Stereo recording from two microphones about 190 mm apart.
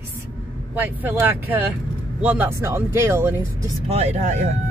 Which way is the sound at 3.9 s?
35° right (ahead or behind).